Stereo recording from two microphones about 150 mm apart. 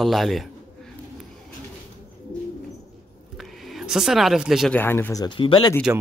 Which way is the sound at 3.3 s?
Centre (ahead or behind).